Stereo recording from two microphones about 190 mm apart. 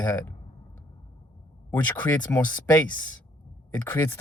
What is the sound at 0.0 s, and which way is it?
Speech, 10° left (ahead or behind).